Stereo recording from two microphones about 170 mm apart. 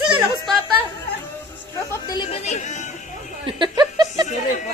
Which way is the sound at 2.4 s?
45° left (ahead or behind).